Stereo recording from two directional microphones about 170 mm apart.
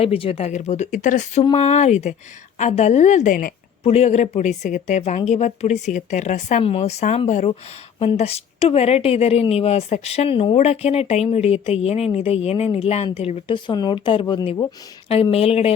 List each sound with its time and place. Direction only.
0.0 s a woman's voice: 35° left (ahead or behind); by 3.5 s 50° left (ahead or behind)
3.8 s a woman's voice: 40° left (ahead or behind)